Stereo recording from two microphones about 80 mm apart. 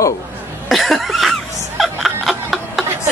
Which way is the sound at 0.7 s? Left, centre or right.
Centre.